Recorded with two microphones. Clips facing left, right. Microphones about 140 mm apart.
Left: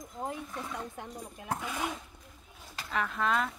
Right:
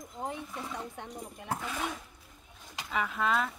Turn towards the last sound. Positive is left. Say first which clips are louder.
# even
turn(degrees=0)  # may be behind; listen again after turning